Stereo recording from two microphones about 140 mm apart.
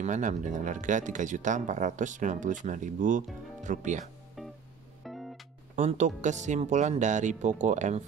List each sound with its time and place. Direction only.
0.0 s speech: 60° right (ahead or behind)
4.4 s music: centre (ahead or behind)
5.8 s speech: 55° right (ahead or behind)